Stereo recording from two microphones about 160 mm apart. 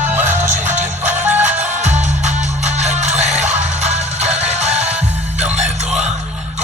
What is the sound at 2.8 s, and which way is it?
Music, 45° right (ahead or behind).